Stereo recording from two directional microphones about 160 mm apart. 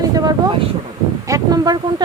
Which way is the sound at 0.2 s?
25° right (ahead or behind).